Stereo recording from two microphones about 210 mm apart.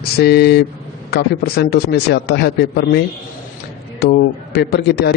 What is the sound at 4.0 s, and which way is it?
Speech, 50° left (ahead or behind).